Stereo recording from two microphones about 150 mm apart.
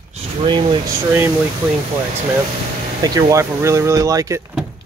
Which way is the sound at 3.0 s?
25° right (ahead or behind).